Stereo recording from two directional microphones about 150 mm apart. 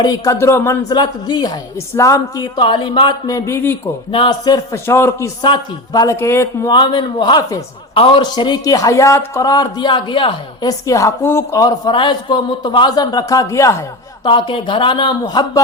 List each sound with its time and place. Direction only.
0.0 s a man's voice: 25° left (ahead or behind)
0.9 s a man's voice: 30° left (ahead or behind)
4.1 s a man's voice: 30° left (ahead or behind)
5.4 s a man's voice: 30° left (ahead or behind)
14.3 s a man's voice: 35° left (ahead or behind)